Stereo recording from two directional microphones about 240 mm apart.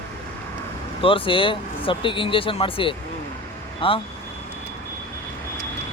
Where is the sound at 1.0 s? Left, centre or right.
Left.